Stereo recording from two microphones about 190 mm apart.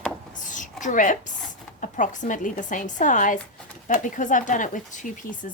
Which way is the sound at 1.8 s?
40° left (ahead or behind).